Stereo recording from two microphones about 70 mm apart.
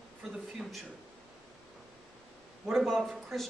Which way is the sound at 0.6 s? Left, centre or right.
Centre.